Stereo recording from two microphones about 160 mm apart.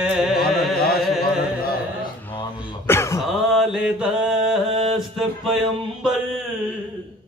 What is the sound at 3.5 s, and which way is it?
Mantra, 5° right (ahead or behind).